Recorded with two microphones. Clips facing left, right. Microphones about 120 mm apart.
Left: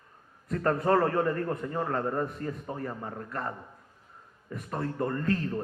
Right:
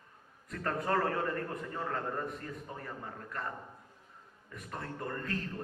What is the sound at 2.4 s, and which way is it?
Speech, 55° left (ahead or behind).